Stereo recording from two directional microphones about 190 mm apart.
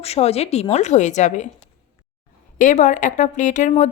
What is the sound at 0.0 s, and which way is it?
A woman's voice, 35° left (ahead or behind).